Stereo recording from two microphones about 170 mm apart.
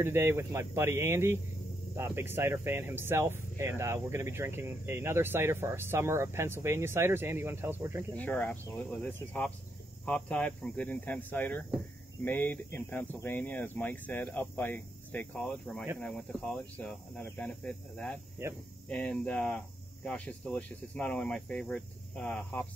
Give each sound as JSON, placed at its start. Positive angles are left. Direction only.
{"t": 0.0, "sound": "speech", "side_deg": -15}
{"t": 8.2, "sound": "speech", "side_deg": 10}